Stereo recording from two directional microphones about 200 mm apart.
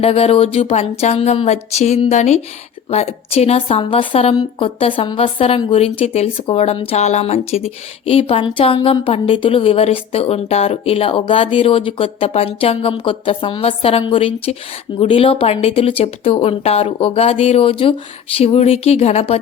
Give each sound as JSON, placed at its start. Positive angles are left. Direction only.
{"t": 0.0, "sound": "a woman's voice", "side_deg": 30}